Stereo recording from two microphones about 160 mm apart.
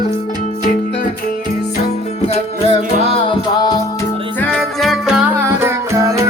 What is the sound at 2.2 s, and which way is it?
Music, 40° left (ahead or behind).